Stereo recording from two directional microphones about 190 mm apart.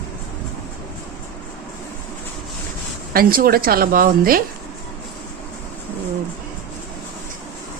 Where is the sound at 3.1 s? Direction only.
50° right (ahead or behind).